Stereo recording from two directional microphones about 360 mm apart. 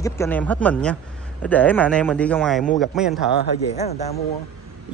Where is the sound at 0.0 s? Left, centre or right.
Centre.